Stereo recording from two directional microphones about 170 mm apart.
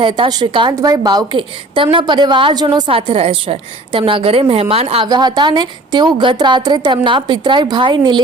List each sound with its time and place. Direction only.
0.0 s a woman's voice: 30° right (ahead or behind)
5.0 s a woman's voice: 25° right (ahead or behind)